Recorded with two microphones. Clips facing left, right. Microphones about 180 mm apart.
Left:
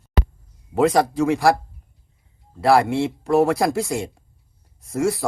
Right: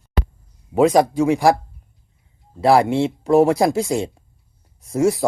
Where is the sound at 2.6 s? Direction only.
20° right (ahead or behind).